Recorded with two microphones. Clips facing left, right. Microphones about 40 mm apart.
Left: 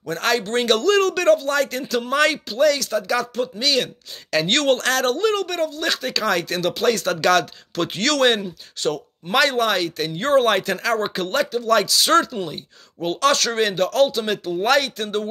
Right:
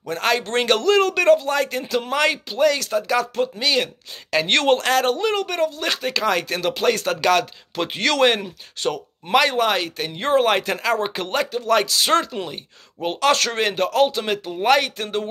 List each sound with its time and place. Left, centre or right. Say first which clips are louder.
0.0 s speech: even; right
0.4 s speech: even; right
9.3 s speech: right 1 dB; centre